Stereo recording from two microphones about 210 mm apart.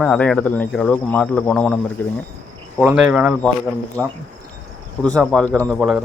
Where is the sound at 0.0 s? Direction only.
5° left (ahead or behind).